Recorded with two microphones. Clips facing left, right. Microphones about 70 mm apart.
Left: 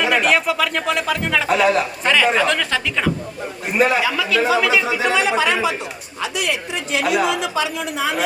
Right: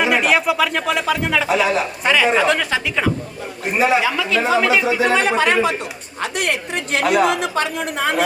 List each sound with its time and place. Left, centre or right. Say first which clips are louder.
0.0 s speech: right 1 dB; centre
2.3 s speech: right 2 dB; centre
3.8 s a man's voice: right 2 dB; right